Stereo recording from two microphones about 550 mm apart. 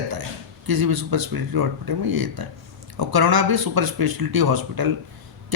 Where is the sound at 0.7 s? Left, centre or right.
Right.